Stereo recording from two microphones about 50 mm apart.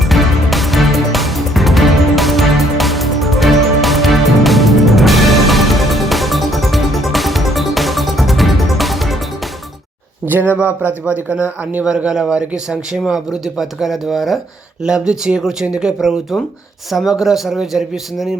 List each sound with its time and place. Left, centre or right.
0.0 s music: centre
10.2 s speech: right
11.0 s speech: right
11.9 s speech: centre
14.8 s speech: centre